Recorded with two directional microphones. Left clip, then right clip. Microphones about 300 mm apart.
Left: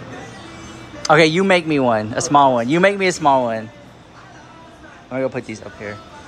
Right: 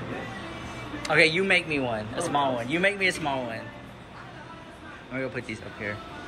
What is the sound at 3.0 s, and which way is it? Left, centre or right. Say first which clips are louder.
Speech: left 11 dB; centre.